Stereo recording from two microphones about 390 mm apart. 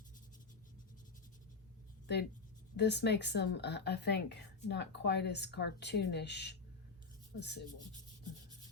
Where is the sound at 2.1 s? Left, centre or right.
Left.